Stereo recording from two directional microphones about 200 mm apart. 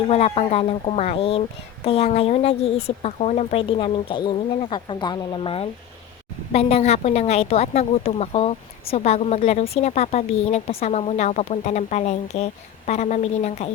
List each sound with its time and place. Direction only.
0.1 s speech: 30° left (ahead or behind)